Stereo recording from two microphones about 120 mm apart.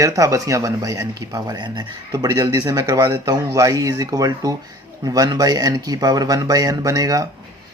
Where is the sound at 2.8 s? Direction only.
20° right (ahead or behind).